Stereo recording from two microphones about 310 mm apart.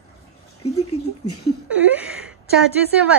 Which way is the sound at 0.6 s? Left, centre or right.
Left.